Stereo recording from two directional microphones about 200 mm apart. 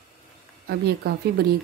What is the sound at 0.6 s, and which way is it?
Speech, 55° right (ahead or behind).